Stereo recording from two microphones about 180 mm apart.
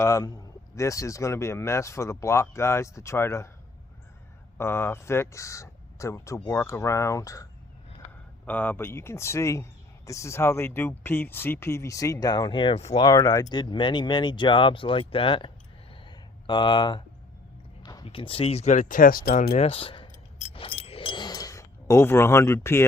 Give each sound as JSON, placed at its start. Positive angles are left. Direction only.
{"t": 0.0, "sound": "speech", "side_deg": 15}
{"t": 4.5, "sound": "speech", "side_deg": 15}
{"t": 8.4, "sound": "speech", "side_deg": 10}
{"t": 13.1, "sound": "speech", "side_deg": 20}
{"t": 19.6, "sound": "speech", "side_deg": 30}
{"t": 20.4, "sound": "keys jangling", "side_deg": 30}